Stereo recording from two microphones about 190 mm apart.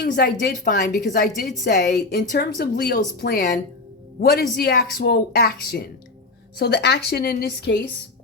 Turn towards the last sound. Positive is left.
turn(degrees=60)  # may be behind; listen again after turning